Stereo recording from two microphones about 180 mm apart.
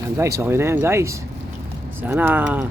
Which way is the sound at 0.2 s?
15° right (ahead or behind).